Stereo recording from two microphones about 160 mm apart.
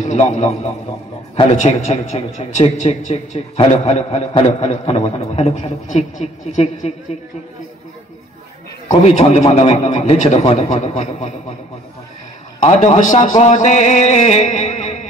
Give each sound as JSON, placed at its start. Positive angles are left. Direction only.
{"t": 0.0, "sound": "a man's voice", "side_deg": 45}
{"t": 1.6, "sound": "a man's voice", "side_deg": 50}
{"t": 8.8, "sound": "a man's voice", "side_deg": 45}
{"t": 12.6, "sound": "a man's voice", "side_deg": 40}